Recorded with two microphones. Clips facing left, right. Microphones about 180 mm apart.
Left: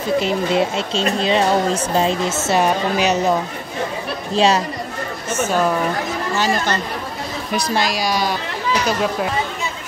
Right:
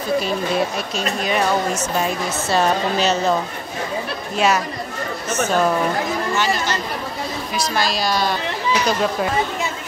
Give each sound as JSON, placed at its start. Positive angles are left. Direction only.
{"t": 0.2, "sound": "speech", "side_deg": 20}
{"t": 2.4, "sound": "a woman's voice", "side_deg": 15}
{"t": 4.4, "sound": "speech", "side_deg": 30}
{"t": 5.4, "sound": "speech", "side_deg": 5}
{"t": 6.3, "sound": "speech", "side_deg": 40}
{"t": 7.7, "sound": "a woman's voice", "side_deg": 15}